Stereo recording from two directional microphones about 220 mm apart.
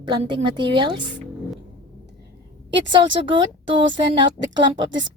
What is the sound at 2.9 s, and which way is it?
A woman's voice, 20° right (ahead or behind).